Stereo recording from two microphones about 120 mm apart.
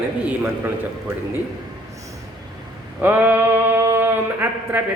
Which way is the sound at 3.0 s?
15° right (ahead or behind).